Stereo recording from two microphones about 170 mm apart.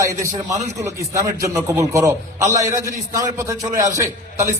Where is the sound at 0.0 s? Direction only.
20° right (ahead or behind).